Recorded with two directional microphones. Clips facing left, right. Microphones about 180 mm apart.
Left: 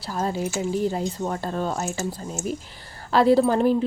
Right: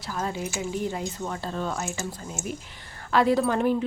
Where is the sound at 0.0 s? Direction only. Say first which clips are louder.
Left 4 dB; 35° left (ahead or behind).